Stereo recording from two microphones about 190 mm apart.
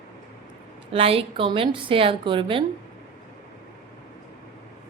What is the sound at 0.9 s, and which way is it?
A woman's voice, 30° right (ahead or behind).